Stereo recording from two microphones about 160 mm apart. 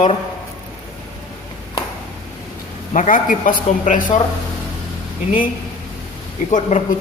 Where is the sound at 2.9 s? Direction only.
55° left (ahead or behind).